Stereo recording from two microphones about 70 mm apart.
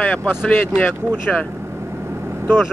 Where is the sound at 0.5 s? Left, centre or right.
Left.